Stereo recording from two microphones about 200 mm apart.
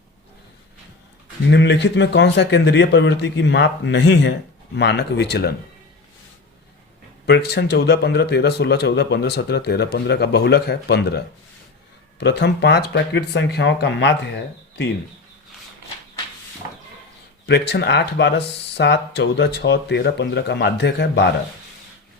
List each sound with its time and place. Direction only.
1.5 s speech: 60° left (ahead or behind)
7.3 s speech: 55° left (ahead or behind)
12.2 s speech: 60° left (ahead or behind)
17.4 s speech: 55° left (ahead or behind)